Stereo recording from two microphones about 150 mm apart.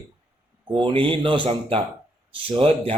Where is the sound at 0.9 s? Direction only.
35° right (ahead or behind).